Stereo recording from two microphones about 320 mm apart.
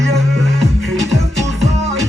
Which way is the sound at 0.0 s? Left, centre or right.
Centre.